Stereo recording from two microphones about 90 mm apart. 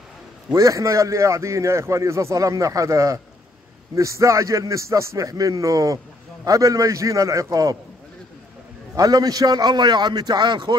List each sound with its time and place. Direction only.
0.5 s a man's voice: 40° right (ahead or behind)
8.9 s a man's voice: 45° right (ahead or behind)